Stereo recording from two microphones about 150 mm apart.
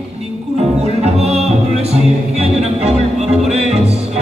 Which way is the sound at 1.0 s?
45° right (ahead or behind).